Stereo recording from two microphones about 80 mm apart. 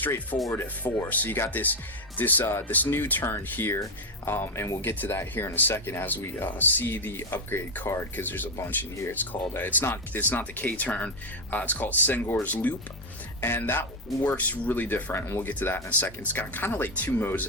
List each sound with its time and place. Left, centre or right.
0.0 s speech: left